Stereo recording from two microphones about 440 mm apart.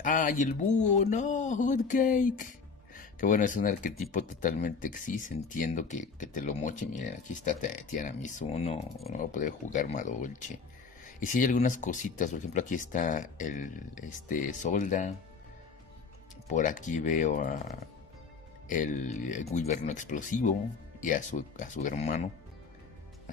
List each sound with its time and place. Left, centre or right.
0.0 s speech: centre
16.4 s speech: centre